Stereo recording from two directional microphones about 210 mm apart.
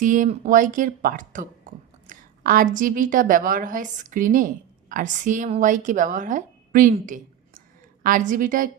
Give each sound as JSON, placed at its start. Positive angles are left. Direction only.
{"t": 0.0, "sound": "a woman's voice", "side_deg": -40}